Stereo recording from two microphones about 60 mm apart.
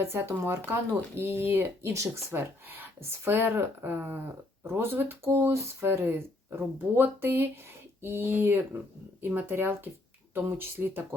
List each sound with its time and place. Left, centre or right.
0.0 s speech: right